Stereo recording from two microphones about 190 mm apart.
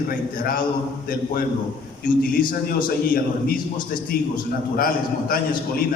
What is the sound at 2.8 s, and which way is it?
Speech, 50° left (ahead or behind).